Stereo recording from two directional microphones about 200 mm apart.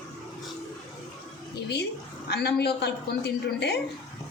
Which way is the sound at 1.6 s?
55° left (ahead or behind).